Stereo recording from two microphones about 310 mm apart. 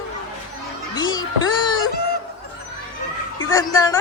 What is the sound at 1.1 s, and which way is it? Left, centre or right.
Speech, centre.